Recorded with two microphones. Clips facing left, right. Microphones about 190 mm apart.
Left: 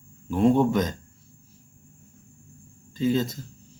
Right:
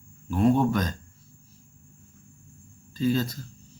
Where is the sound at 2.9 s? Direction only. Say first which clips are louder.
Left 1 dB; 20° left (ahead or behind).